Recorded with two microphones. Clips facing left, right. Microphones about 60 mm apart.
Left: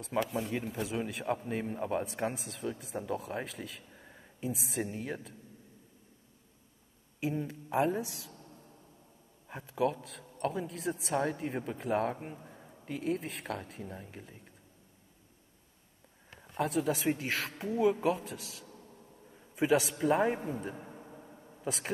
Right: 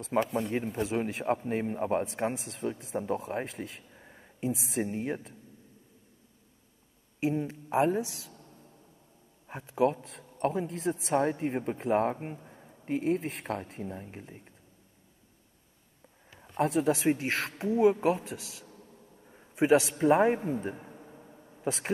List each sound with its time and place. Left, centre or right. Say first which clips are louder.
0.0 s speech: right 4 dB; right
3.9 s a sound: right 1 dB; centre
4.4 s speech: right 4 dB; right
7.3 s speech: right 2 dB; right
9.5 s speech: right 4 dB; right
12.4 s a sound: even; centre
12.8 s speech: right 5 dB; right
16.5 s speech: right 4 dB; right
19.2 s a sound: right 4 dB; centre
19.9 s speech: right 5 dB; right
20.8 s a sound: even; centre
21.6 s speech: right 5 dB; right